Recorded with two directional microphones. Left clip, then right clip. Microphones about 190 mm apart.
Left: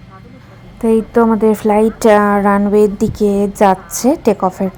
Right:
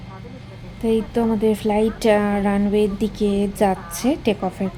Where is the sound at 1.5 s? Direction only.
20° left (ahead or behind).